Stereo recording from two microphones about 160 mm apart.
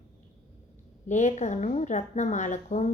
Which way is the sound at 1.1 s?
50° left (ahead or behind).